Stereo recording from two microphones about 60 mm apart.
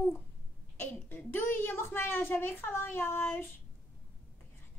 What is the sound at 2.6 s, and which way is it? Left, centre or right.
Speech, left.